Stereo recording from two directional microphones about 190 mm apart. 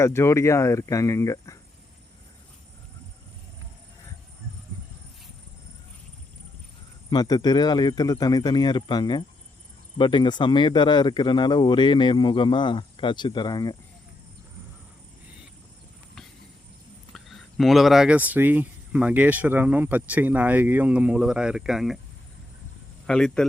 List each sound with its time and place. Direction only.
0.0 s speech: 15° left (ahead or behind)
7.1 s speech: 20° left (ahead or behind)
17.1 s speech: centre (ahead or behind)
23.0 s speech: 5° left (ahead or behind)